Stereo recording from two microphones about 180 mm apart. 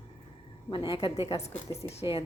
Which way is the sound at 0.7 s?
30° left (ahead or behind).